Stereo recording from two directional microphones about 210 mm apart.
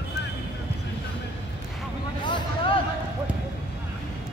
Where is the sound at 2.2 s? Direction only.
20° left (ahead or behind).